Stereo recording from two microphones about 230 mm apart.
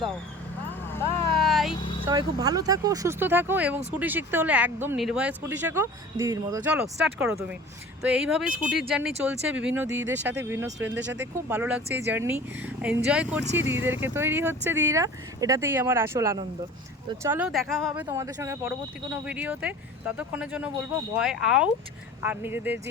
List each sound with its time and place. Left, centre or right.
0.9 s vehicle: centre
1.4 s vehicle: centre
1.7 s vehicle: centre
2.0 s speech: centre
10.9 s speech: right
11.4 s speech: centre